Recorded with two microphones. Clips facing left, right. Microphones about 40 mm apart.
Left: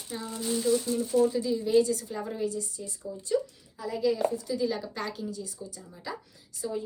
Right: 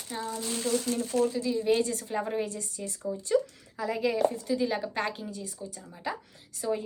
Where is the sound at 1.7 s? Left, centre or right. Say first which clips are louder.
Left 4 dB; right.